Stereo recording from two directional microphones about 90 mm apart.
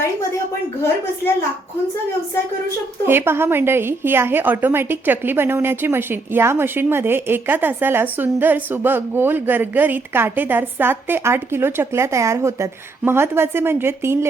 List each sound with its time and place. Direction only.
3.1 s a woman's voice: 25° right (ahead or behind)